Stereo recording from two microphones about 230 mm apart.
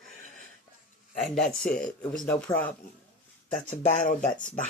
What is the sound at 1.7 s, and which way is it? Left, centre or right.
Speech, centre.